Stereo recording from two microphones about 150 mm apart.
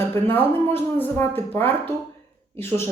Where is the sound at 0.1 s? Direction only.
15° left (ahead or behind).